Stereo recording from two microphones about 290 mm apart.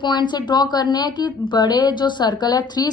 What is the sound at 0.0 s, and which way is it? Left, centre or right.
A woman's voice, centre.